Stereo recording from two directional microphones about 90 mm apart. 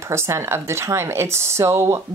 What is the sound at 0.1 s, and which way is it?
A woman's voice, 30° right (ahead or behind).